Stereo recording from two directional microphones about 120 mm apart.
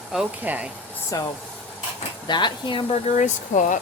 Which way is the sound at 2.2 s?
40° left (ahead or behind).